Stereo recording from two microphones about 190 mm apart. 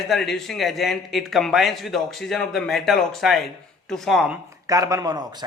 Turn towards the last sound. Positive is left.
turn(degrees=-20)  # may be behind; listen again after turning